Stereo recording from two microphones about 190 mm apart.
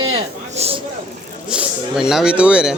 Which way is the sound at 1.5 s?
5° right (ahead or behind).